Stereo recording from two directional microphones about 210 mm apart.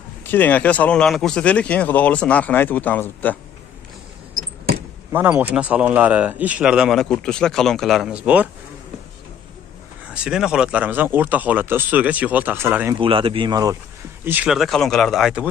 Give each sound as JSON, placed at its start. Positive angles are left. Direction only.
{"t": 0.3, "sound": "speech", "side_deg": 10}
{"t": 5.1, "sound": "speech", "side_deg": -10}
{"t": 10.1, "sound": "speech", "side_deg": -5}
{"t": 13.0, "sound": "speech", "side_deg": -25}
{"t": 14.2, "sound": "speech", "side_deg": -5}